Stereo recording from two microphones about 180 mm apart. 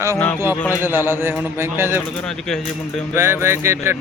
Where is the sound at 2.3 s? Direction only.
5° left (ahead or behind).